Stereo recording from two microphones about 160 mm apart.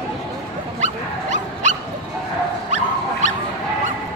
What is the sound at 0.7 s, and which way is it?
Dog, 50° right (ahead or behind).